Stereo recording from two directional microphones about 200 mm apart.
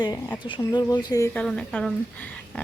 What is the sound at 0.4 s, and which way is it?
Speech, 20° left (ahead or behind).